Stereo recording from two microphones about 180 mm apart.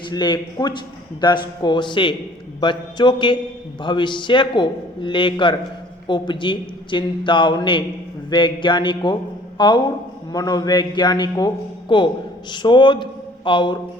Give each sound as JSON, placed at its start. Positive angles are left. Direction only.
{"t": 0.1, "sound": "a man's voice", "side_deg": 25}